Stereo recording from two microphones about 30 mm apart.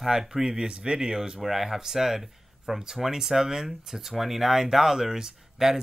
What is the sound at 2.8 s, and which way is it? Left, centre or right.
Speech, centre.